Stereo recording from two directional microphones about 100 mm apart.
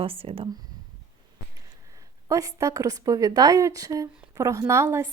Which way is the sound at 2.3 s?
30° right (ahead or behind).